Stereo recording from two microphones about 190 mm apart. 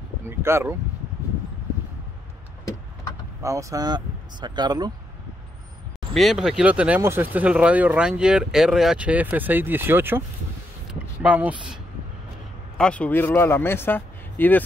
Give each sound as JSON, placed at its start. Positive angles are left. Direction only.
{"t": 0.2, "sound": "speech", "side_deg": -15}
{"t": 3.4, "sound": "speech", "side_deg": -15}
{"t": 6.1, "sound": "speech", "side_deg": 0}
{"t": 12.7, "sound": "speech", "side_deg": 5}